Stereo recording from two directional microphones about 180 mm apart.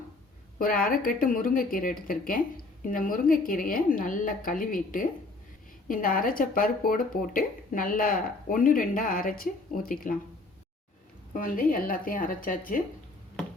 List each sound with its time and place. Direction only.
0.6 s speech: 50° left (ahead or behind)
11.3 s speech: 50° left (ahead or behind)